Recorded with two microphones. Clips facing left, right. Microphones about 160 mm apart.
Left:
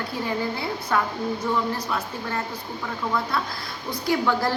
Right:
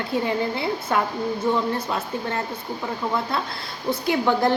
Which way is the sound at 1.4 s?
25° right (ahead or behind).